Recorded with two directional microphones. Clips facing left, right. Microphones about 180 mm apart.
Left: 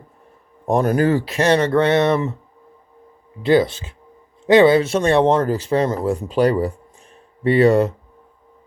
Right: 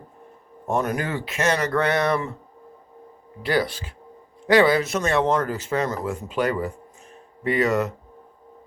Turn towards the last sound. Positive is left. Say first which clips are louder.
# left 8 dB
turn(degrees=30)  # may be behind; listen again after turning